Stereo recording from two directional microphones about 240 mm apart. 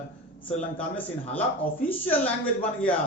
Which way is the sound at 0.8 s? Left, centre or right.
Centre.